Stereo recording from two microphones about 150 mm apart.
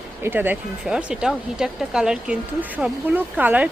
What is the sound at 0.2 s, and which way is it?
Speech, 15° right (ahead or behind).